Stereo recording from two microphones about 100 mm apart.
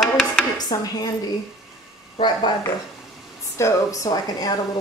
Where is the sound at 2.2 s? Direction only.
50° left (ahead or behind).